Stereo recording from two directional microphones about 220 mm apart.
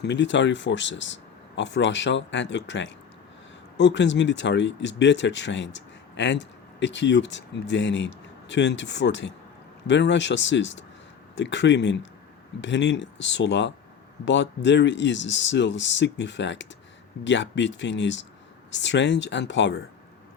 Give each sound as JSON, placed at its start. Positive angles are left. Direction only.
{"t": 0.0, "sound": "speech", "side_deg": 50}